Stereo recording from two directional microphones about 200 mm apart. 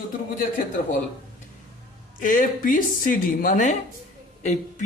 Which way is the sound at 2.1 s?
40° left (ahead or behind).